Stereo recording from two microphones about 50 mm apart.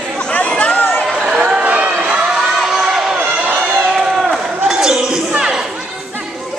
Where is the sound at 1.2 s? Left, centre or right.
Centre.